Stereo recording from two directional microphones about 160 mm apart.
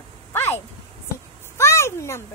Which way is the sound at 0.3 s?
15° left (ahead or behind).